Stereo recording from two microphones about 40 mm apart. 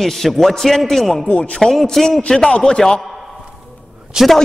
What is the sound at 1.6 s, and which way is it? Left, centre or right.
Speech, centre.